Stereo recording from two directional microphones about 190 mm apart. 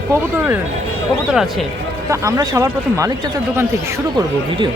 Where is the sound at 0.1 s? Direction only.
10° right (ahead or behind).